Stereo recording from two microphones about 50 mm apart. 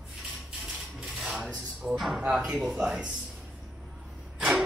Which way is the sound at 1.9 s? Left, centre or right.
Centre.